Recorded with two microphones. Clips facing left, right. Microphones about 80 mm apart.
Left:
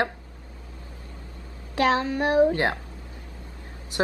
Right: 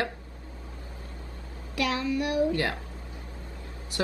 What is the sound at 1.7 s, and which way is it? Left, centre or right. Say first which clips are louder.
Speech: left 5 dB; left.